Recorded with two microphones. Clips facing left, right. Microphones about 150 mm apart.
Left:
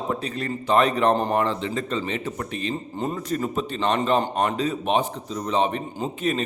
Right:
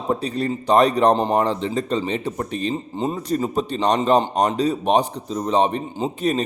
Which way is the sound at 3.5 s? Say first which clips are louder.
Right 4 dB; 35° right (ahead or behind).